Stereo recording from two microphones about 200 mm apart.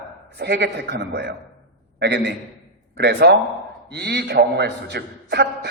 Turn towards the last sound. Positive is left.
turn(degrees=-55)  # may be behind; listen again after turning